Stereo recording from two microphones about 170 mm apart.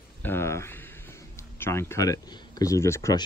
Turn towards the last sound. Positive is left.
turn(degrees=20)  # may be behind; listen again after turning